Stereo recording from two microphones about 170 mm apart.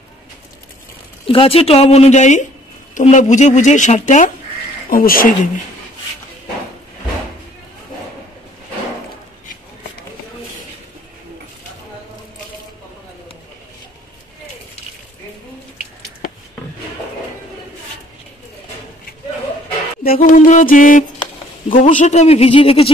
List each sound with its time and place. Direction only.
1.2 s a woman's voice: 35° left (ahead or behind)
4.8 s speech: 55° left (ahead or behind)
20.0 s music: 55° left (ahead or behind)
21.7 s a woman's voice: 45° left (ahead or behind)